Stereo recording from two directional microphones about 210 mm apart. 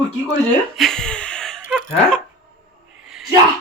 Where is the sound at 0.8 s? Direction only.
Centre (ahead or behind).